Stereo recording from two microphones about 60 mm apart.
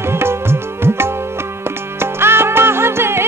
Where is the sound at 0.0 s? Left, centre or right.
Right.